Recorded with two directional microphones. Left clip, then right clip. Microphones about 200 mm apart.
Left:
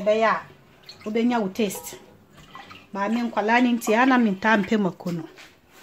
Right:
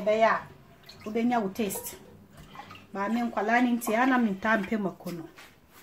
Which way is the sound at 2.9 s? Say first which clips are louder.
Left 5 dB; 45° left (ahead or behind).